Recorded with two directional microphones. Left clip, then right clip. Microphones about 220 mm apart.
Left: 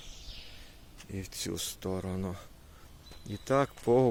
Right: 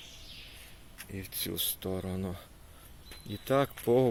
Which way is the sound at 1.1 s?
15° left (ahead or behind).